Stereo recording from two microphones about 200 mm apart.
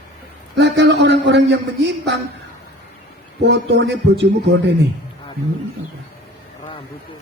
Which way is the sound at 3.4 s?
60° right (ahead or behind).